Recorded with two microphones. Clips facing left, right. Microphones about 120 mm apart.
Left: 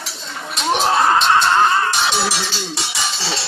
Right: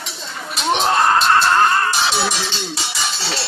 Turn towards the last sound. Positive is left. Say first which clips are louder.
# even
turn(degrees=0)  # may be behind; listen again after turning